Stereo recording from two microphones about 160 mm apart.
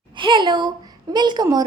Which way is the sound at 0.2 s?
30° right (ahead or behind).